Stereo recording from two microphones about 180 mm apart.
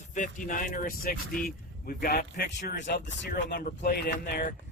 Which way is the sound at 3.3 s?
55° left (ahead or behind).